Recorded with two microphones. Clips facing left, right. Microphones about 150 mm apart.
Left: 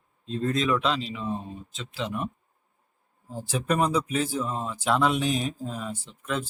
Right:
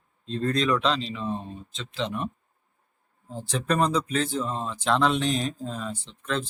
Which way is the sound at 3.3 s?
10° left (ahead or behind).